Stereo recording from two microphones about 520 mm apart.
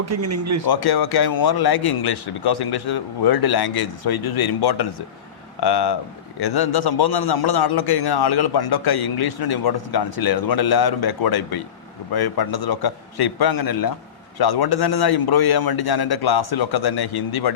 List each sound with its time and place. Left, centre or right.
0.0 s speech: right
0.7 s a man's voice: left